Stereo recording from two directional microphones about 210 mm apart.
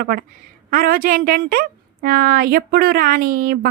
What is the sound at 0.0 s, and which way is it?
A woman's voice, 45° right (ahead or behind).